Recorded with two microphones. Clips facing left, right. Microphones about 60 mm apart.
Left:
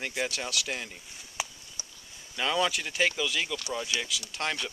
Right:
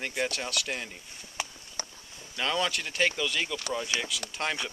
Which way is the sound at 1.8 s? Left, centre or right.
Right.